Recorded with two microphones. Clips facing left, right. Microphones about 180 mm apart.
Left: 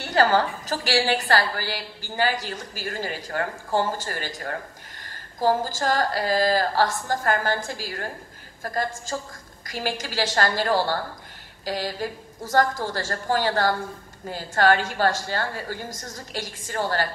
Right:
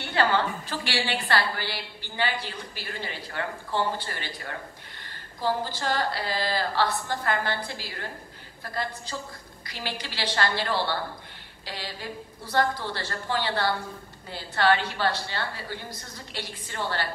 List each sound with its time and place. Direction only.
0.0 s a woman's voice: 40° left (ahead or behind)